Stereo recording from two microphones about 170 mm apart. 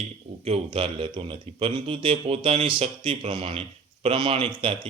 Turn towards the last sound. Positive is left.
turn(degrees=-35)  # may be behind; listen again after turning